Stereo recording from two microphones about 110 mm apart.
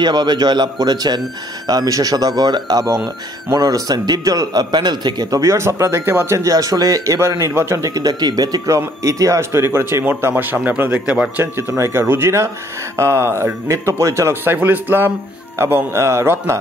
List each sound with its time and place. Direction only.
0.0 s speech: 45° right (ahead or behind)
2.8 s speech: centre (ahead or behind)
3.5 s a man's voice: 40° right (ahead or behind); by 11.6 s 15° right (ahead or behind)
11.7 s a man's voice: 25° right (ahead or behind)